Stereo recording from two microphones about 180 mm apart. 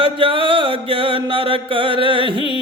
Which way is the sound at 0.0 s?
30° right (ahead or behind).